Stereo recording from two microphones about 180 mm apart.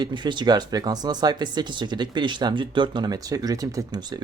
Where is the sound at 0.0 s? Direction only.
25° right (ahead or behind).